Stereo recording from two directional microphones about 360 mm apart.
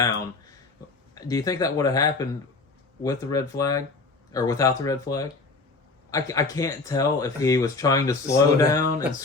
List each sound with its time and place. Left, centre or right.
1.1 s speech: centre